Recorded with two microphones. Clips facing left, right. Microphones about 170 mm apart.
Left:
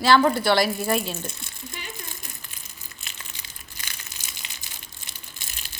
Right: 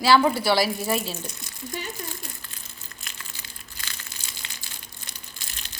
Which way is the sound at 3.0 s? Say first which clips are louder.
Even; 25° left (ahead or behind).